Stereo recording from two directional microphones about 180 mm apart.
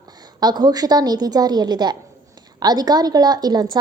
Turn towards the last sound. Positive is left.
turn(degrees=-20)  # may be behind; listen again after turning